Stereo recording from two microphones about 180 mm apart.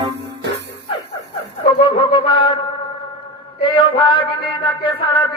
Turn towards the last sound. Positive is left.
turn(degrees=30)  # may be behind; listen again after turning